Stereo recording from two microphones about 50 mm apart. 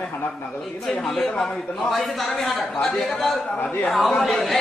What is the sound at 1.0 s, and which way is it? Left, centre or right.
Speech, centre.